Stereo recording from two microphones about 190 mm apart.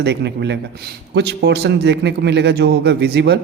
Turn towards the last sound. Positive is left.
turn(degrees=-60)  # may be behind; listen again after turning